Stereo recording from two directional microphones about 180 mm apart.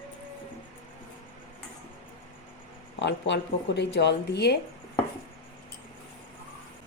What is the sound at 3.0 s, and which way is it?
A woman's voice, 75° left (ahead or behind).